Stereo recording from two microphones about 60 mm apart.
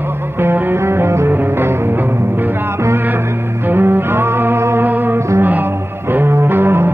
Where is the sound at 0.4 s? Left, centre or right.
Right.